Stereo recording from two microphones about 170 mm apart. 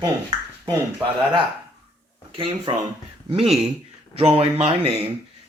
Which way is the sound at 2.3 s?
30° right (ahead or behind).